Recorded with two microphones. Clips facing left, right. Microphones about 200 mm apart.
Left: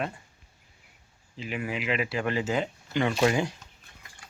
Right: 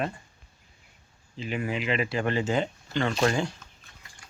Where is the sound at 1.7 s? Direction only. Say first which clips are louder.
Right 1 dB; 5° left (ahead or behind).